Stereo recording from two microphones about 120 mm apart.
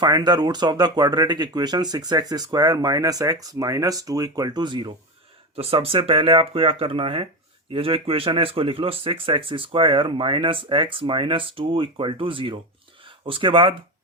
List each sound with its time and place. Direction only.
0.0 s speech: 35° right (ahead or behind)
5.5 s speech: 50° right (ahead or behind)